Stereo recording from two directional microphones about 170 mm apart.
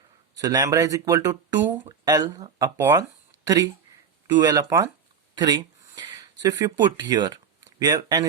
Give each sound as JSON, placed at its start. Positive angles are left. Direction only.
{"t": 0.3, "sound": "speech", "side_deg": -20}
{"t": 5.3, "sound": "a sound", "side_deg": -25}
{"t": 6.4, "sound": "speech", "side_deg": -25}